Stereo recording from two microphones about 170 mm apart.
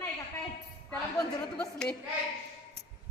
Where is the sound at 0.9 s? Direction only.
5° left (ahead or behind).